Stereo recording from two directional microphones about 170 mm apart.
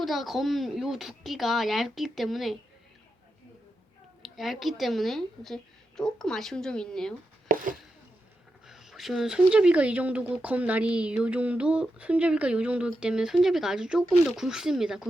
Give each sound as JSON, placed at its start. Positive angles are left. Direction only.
{"t": 0.0, "sound": "speech", "side_deg": 0}
{"t": 4.2, "sound": "speech", "side_deg": 0}
{"t": 7.4, "sound": "chopping", "side_deg": -55}
{"t": 8.6, "sound": "speech", "side_deg": 0}